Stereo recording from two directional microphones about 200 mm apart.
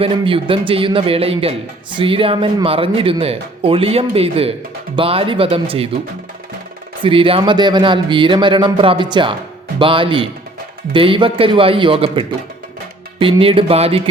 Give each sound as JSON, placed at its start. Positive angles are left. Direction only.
{"t": 0.0, "sound": "a man's voice", "side_deg": -25}
{"t": 7.0, "sound": "a man's voice", "side_deg": -25}